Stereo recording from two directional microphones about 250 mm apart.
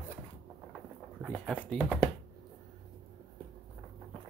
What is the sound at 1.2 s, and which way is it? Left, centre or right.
Speech, centre.